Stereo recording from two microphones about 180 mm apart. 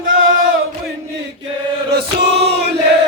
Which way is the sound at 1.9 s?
65° right (ahead or behind).